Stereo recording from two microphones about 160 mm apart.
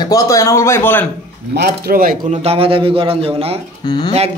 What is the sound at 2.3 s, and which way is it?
A man's voice, 40° right (ahead or behind).